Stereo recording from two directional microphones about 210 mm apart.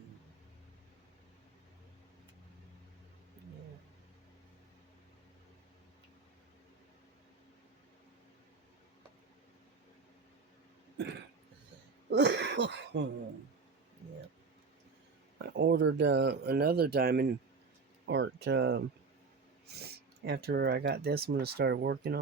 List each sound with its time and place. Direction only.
12.1 s cough: 55° right (ahead or behind)
15.4 s speech: 55° right (ahead or behind)